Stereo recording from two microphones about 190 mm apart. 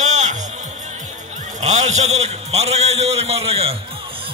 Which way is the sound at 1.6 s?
40° right (ahead or behind).